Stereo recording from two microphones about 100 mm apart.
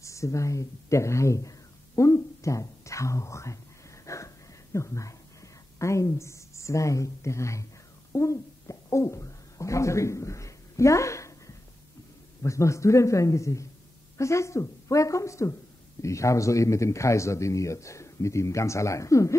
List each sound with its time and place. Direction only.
0.0 s a man's voice: 30° left (ahead or behind)
4.0 s dog: 30° left (ahead or behind)
4.7 s a man's voice: 30° left (ahead or behind)